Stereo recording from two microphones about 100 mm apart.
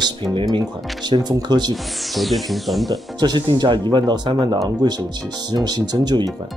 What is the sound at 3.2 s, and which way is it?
Speech, 45° right (ahead or behind).